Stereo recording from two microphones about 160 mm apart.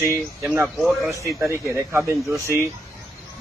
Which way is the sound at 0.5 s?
5° right (ahead or behind).